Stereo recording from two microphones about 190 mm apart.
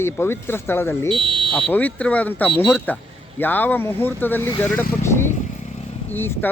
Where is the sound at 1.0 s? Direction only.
25° right (ahead or behind).